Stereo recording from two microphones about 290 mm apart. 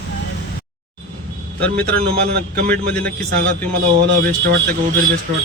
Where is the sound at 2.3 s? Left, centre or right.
Right.